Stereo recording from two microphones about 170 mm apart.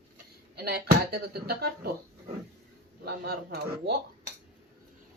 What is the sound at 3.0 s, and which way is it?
Speech, 65° right (ahead or behind).